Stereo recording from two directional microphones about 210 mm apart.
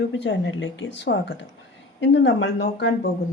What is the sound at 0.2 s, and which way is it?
Speech, 55° left (ahead or behind).